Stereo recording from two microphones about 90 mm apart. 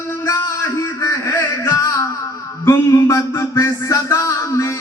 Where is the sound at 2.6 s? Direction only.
30° left (ahead or behind).